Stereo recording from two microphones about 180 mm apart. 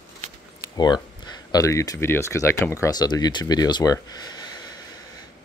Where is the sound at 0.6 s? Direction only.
25° left (ahead or behind).